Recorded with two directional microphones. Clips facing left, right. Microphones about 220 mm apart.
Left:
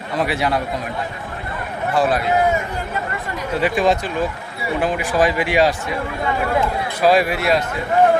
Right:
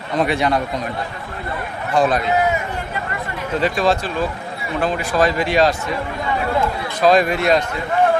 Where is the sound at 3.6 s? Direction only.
15° left (ahead or behind).